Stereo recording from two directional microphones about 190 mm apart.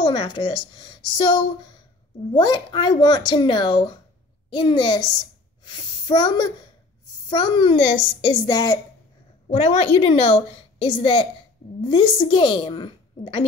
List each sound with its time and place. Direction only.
0.0 s a woman's voice: 25° left (ahead or behind)
9.5 s a woman's voice: 35° left (ahead or behind)